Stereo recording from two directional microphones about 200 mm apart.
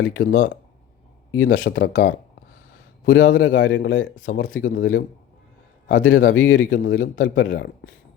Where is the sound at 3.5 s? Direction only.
70° left (ahead or behind).